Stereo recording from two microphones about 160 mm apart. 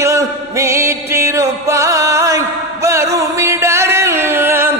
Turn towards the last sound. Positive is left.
turn(degrees=-15)  # may be behind; listen again after turning